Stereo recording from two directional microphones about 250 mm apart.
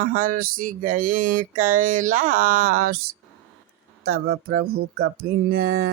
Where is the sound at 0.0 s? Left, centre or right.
Right.